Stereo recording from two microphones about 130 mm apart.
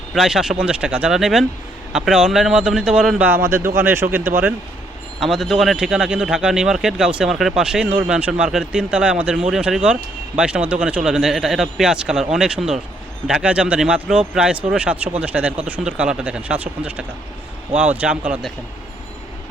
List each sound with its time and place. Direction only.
0.1 s speech: 5° right (ahead or behind)
3.2 s speech: 20° right (ahead or behind)
5.2 s speech: centre (ahead or behind)